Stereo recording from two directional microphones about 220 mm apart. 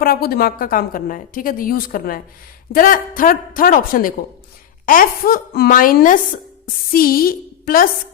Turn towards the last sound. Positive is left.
turn(degrees=40)  # may be behind; listen again after turning